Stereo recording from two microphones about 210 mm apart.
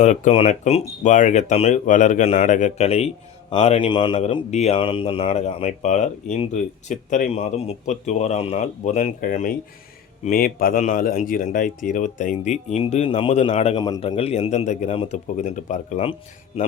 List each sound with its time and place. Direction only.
0.0 s speech: 35° left (ahead or behind)
13.7 s a man's voice: 20° left (ahead or behind)